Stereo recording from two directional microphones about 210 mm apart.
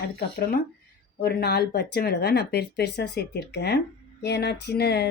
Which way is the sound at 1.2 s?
50° left (ahead or behind).